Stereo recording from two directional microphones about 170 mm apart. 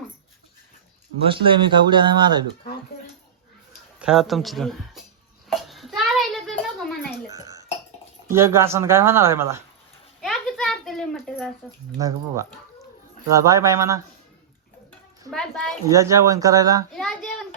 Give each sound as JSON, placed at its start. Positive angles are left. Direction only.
{"t": 1.3, "sound": "speech", "side_deg": -30}
{"t": 4.0, "sound": "speech", "side_deg": 0}
{"t": 5.5, "sound": "a sound", "side_deg": 0}
{"t": 7.3, "sound": "dishes", "side_deg": -20}
{"t": 8.3, "sound": "speech", "side_deg": -15}
{"t": 10.2, "sound": "a sound", "side_deg": 0}
{"t": 11.9, "sound": "speech", "side_deg": -20}
{"t": 15.3, "sound": "a sound", "side_deg": 5}
{"t": 15.9, "sound": "speech", "side_deg": -20}
{"t": 16.9, "sound": "child singing", "side_deg": 0}